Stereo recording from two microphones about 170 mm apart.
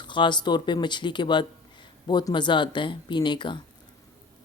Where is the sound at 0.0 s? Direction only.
30° left (ahead or behind).